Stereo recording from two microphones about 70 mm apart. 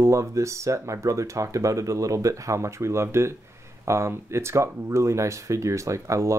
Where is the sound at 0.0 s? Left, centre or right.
Right.